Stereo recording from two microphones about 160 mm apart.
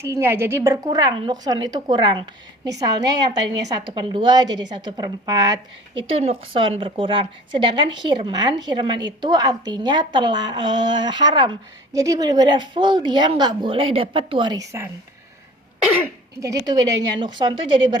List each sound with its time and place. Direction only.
0.0 s a woman's voice: 15° right (ahead or behind)
5.9 s a woman's voice: 35° right (ahead or behind)
16.4 s a woman's voice: 20° right (ahead or behind)